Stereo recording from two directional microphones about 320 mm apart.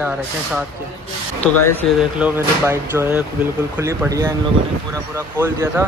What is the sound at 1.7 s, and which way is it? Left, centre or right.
Speech, centre.